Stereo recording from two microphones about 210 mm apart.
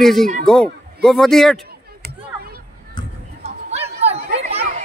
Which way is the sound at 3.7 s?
30° right (ahead or behind).